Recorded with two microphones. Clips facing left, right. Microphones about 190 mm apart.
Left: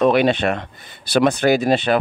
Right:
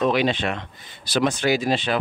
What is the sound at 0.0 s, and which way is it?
Speech, 60° left (ahead or behind).